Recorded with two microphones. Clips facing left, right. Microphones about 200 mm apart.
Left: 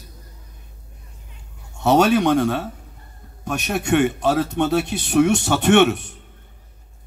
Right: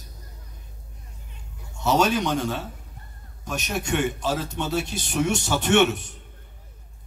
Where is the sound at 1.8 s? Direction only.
60° left (ahead or behind).